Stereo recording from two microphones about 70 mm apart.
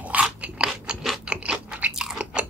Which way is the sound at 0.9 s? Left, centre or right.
Centre.